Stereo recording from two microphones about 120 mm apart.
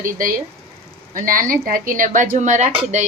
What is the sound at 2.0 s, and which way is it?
Speech, 90° right.